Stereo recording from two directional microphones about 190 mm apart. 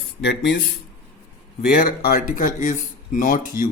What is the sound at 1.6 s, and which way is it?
Speech, 50° left (ahead or behind).